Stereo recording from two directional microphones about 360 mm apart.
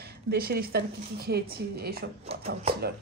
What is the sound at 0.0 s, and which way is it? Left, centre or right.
A woman's voice, right.